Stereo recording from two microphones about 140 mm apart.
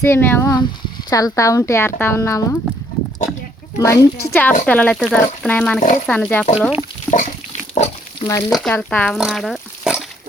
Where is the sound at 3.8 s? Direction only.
20° left (ahead or behind).